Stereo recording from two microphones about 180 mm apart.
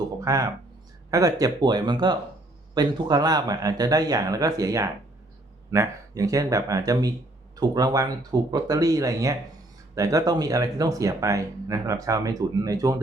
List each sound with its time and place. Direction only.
0.2 s speech: 20° right (ahead or behind)